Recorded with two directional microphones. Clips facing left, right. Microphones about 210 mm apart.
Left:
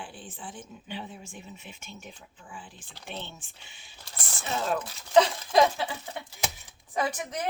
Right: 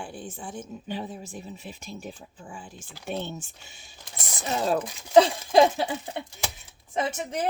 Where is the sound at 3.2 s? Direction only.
40° right (ahead or behind).